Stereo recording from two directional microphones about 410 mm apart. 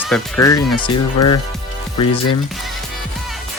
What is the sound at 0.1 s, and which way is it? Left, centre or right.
Speech, centre.